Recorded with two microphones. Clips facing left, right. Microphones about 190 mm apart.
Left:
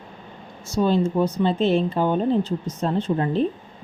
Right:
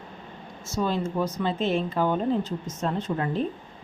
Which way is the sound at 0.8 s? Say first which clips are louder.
Left 6 dB; 30° left (ahead or behind).